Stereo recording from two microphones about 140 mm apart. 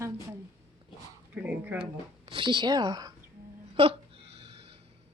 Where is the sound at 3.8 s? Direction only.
40° right (ahead or behind).